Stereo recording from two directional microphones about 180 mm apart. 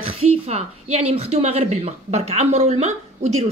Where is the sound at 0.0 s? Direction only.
35° right (ahead or behind).